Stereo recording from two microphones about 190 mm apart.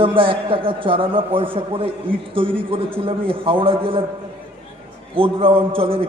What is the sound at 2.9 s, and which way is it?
A man's voice, 30° right (ahead or behind).